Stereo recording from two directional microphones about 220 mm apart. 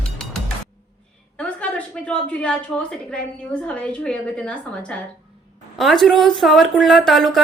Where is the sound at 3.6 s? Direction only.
5° left (ahead or behind).